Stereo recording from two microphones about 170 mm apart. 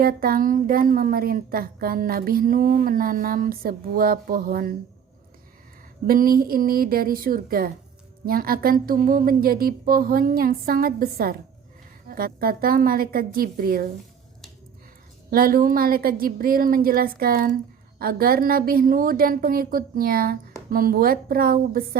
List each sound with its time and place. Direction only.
0.0 s speech: 60° right (ahead or behind)
6.1 s speech: 60° right (ahead or behind)
15.3 s speech: 60° right (ahead or behind)